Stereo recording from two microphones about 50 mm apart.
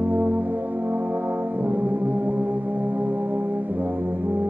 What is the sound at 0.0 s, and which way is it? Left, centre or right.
Brass instrument, right.